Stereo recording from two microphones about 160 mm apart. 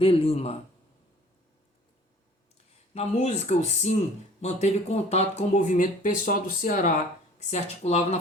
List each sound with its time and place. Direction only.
0.0 s speech: 35° left (ahead or behind)
2.9 s speech: 45° left (ahead or behind)
7.3 s speech: 45° left (ahead or behind)